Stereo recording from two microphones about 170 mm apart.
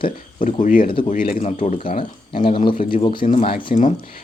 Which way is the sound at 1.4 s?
40° left (ahead or behind).